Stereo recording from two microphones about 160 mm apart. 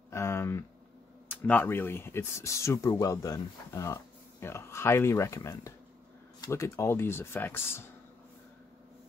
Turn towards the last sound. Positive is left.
turn(degrees=15)  # may be behind; listen again after turning